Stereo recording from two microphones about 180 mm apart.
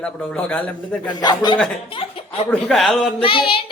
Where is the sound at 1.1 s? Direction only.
25° left (ahead or behind).